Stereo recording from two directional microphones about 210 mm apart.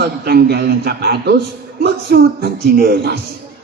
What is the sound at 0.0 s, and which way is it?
A man's voice, 50° right (ahead or behind).